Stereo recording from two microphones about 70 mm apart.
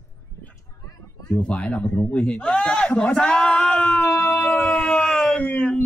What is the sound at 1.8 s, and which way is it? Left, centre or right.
Speech, left.